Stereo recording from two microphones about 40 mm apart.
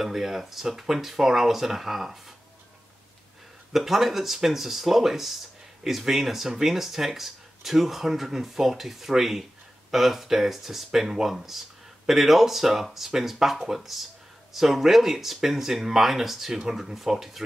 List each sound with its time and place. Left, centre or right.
0.0 s speech: centre
3.7 s speech: centre